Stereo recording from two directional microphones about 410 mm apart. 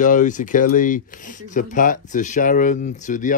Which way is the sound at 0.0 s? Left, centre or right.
Centre.